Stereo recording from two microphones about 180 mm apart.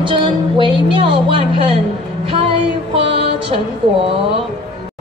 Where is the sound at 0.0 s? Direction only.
25° right (ahead or behind).